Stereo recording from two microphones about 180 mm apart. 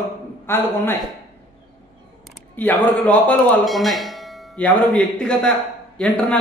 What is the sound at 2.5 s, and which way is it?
A man's voice, 10° left (ahead or behind).